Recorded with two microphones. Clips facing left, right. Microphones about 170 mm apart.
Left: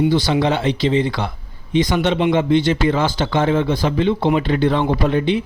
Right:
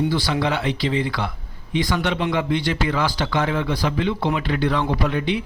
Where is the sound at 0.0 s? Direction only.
20° left (ahead or behind).